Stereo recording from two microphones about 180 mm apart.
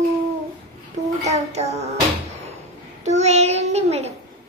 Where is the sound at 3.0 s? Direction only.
40° right (ahead or behind).